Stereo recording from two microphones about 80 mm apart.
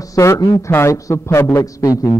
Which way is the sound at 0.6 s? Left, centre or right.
Left.